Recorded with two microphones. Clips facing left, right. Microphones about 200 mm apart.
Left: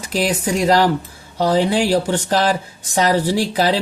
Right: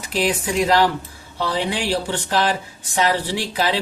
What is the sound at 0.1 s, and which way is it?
Speech, 40° left (ahead or behind).